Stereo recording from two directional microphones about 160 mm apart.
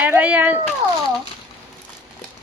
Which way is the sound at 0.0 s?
10° right (ahead or behind).